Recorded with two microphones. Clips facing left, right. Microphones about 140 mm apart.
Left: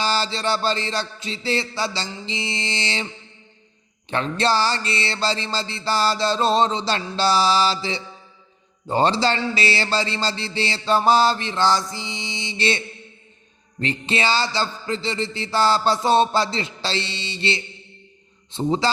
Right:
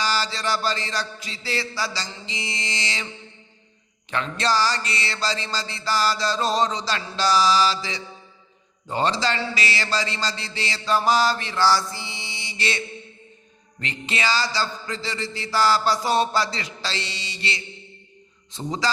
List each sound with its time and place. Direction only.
0.0 s mantra: 25° left (ahead or behind)
4.1 s mantra: 30° left (ahead or behind)